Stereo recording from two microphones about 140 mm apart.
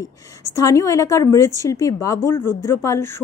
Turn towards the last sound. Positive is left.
turn(degrees=20)  # may be behind; listen again after turning